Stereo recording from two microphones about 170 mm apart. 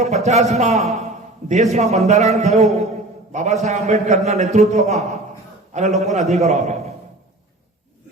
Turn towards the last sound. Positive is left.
turn(degrees=-40)  # may be behind; listen again after turning